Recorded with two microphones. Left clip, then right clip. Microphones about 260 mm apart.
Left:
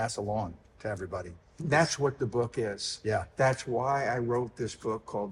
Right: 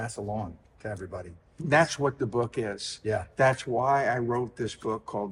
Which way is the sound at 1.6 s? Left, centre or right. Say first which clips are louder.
Right 3 dB; right.